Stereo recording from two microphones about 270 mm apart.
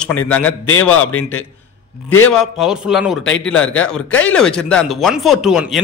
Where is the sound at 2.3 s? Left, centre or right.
Centre.